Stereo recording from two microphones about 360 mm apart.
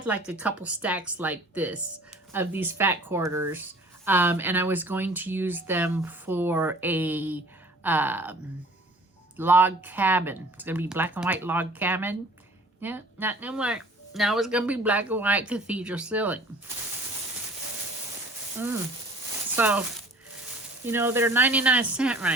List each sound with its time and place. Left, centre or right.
0.3 s speech: centre
9.4 s speech: centre
19.5 s speech: centre
20.8 s speech: centre